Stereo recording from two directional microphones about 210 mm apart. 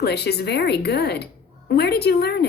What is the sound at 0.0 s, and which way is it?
Speech, 50° left (ahead or behind).